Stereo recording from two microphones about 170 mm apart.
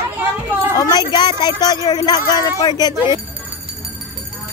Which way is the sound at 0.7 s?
20° left (ahead or behind).